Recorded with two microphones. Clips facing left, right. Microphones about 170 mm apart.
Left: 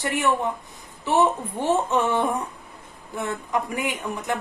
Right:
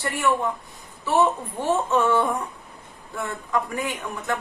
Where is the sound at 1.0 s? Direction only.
20° left (ahead or behind).